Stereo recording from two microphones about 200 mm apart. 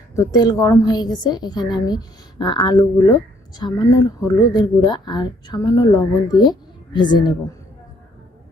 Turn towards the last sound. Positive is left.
turn(degrees=20)  # may be behind; listen again after turning